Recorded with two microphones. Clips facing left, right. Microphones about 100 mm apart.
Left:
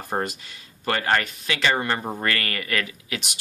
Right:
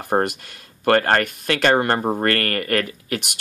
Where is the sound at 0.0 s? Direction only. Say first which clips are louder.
Right 7 dB; 60° right (ahead or behind).